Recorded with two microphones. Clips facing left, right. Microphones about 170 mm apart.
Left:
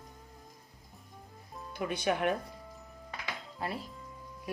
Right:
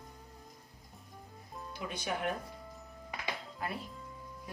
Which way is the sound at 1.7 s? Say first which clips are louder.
Left 7 dB; 55° left (ahead or behind).